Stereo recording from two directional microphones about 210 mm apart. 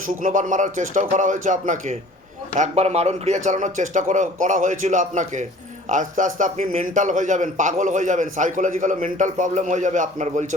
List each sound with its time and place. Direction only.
0.2 s a man's voice: 40° right (ahead or behind)